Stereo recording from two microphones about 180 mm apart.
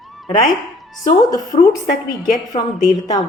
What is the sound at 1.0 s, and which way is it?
Speech, 20° left (ahead or behind).